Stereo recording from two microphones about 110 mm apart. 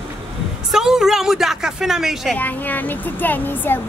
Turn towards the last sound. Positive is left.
turn(degrees=20)  # may be behind; listen again after turning